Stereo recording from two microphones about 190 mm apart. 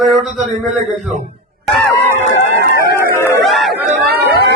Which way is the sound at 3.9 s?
55° right (ahead or behind).